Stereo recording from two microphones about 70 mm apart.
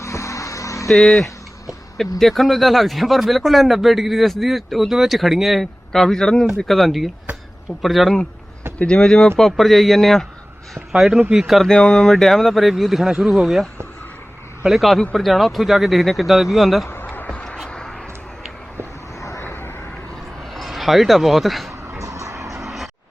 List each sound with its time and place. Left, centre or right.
0.0 s music: left
0.9 s speech: centre
8.8 s speech: centre
16.9 s a sound: left
17.7 s vehicle: centre
19.2 s vehicle: left
19.5 s vehicle: left
20.5 s a man's voice: centre
21.7 s vehicle: right
22.6 s music: centre